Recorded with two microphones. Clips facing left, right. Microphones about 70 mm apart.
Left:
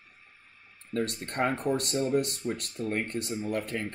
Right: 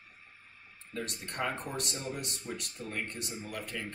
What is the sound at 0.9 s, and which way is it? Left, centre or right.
Speech, left.